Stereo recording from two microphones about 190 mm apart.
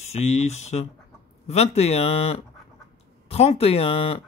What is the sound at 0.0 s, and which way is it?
Speech, 35° left (ahead or behind).